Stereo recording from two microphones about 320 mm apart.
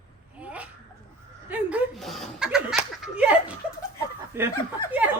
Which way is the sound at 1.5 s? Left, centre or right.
Centre.